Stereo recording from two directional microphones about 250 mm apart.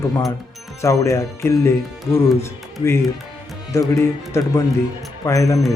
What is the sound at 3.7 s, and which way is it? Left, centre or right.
Speech, centre.